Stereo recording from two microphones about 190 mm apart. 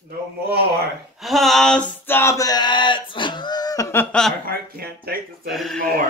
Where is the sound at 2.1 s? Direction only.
15° left (ahead or behind).